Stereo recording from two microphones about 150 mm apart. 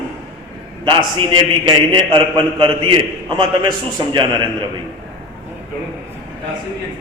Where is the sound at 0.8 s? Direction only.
35° right (ahead or behind).